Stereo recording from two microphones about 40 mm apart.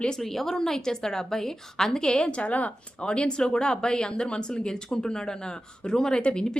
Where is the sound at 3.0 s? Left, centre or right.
Left.